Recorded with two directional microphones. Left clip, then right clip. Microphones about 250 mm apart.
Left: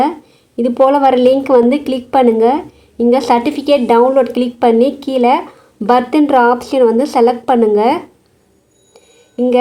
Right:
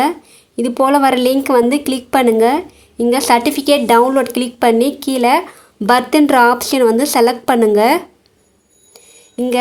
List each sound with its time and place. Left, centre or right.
0.5 s a woman's voice: right
8.9 s music: right